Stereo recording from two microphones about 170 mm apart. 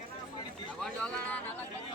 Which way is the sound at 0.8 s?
5° left (ahead or behind).